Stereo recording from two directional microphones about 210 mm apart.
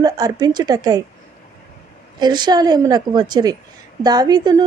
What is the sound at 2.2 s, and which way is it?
A woman's voice, 20° right (ahead or behind).